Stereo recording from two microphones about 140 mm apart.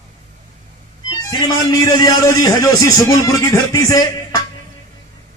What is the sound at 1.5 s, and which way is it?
A man's voice, 30° left (ahead or behind).